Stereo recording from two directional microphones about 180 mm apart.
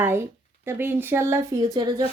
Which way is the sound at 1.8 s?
25° right (ahead or behind).